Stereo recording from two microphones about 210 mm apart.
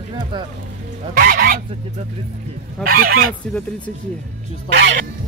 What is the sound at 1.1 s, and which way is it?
Speech, 45° right (ahead or behind).